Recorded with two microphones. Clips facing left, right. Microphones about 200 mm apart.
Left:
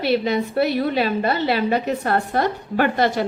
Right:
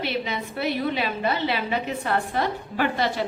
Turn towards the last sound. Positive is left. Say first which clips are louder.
# left 5 dB
turn(degrees=55)  # may be behind; listen again after turning